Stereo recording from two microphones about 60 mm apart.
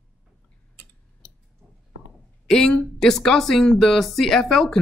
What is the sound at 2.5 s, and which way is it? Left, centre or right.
Speech, centre.